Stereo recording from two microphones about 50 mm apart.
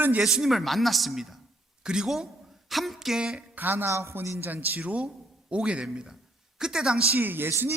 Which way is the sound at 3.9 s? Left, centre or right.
Right.